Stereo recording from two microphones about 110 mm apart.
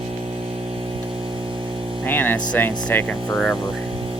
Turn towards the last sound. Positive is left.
turn(degrees=5)  # may be behind; listen again after turning